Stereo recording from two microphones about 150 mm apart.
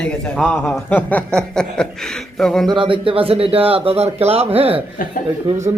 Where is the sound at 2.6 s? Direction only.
35° right (ahead or behind).